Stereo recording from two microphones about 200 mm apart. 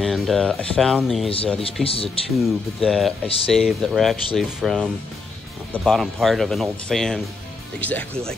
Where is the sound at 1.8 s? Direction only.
30° left (ahead or behind).